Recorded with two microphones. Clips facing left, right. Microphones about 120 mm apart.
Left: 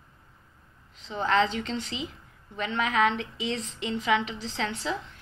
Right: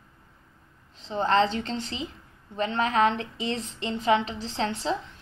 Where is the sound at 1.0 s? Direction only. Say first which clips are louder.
Right 2 dB; 35° right (ahead or behind).